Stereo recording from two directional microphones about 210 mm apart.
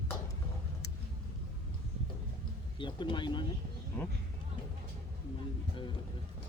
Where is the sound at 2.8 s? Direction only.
20° left (ahead or behind).